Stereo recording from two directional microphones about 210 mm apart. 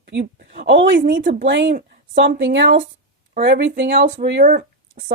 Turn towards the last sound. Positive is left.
turn(degrees=-60)  # may be behind; listen again after turning